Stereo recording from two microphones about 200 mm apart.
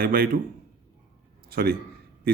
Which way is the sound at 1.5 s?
50° right (ahead or behind).